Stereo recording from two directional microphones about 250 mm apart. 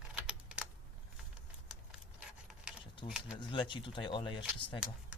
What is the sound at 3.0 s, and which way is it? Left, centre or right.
Speech, centre.